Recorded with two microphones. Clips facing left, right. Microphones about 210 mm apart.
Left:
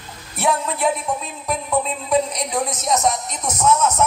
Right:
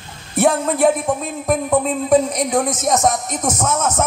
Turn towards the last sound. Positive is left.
turn(degrees=-50)  # may be behind; listen again after turning